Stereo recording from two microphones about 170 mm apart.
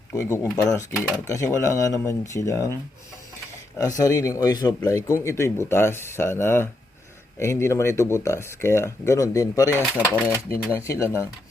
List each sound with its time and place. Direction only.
0.2 s speech: 15° left (ahead or behind)
3.8 s speech: 20° left (ahead or behind)